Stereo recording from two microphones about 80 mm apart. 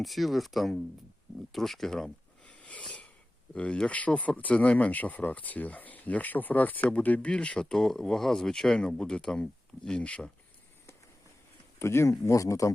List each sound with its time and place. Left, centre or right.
0.0 s speech: centre
2.4 s a sound: centre
3.5 s speech: centre
11.8 s speech: left